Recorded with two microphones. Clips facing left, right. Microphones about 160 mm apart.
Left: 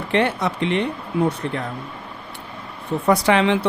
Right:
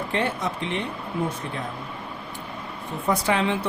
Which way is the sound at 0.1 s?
75° left (ahead or behind).